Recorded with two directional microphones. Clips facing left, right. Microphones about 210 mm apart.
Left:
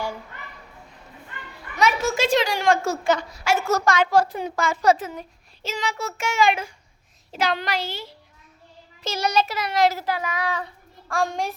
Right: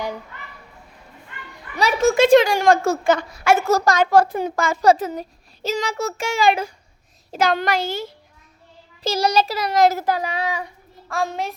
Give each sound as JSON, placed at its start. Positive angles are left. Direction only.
{"t": 1.7, "sound": "a sound", "side_deg": -35}
{"t": 2.0, "sound": "a woman's voice", "side_deg": -55}
{"t": 3.7, "sound": "a woman's voice", "side_deg": -35}
{"t": 7.3, "sound": "a woman's voice", "side_deg": -45}
{"t": 9.0, "sound": "a woman's voice", "side_deg": -35}
{"t": 10.4, "sound": "a child's voice", "side_deg": -10}